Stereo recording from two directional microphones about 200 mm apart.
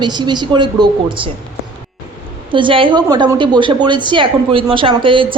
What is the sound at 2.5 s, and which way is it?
A woman's voice, 25° right (ahead or behind).